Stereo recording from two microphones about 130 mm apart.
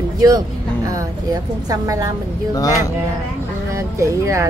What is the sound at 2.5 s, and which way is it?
Speech, 25° left (ahead or behind).